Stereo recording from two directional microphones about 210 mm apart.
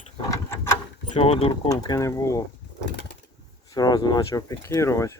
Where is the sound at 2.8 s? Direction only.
55° left (ahead or behind).